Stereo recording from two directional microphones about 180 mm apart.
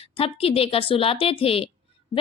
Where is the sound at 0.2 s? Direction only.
30° left (ahead or behind).